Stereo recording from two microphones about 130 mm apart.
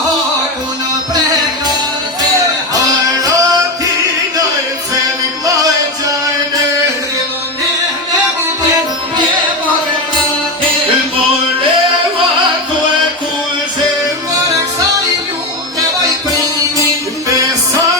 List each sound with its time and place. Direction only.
2.7 s music: 25° right (ahead or behind)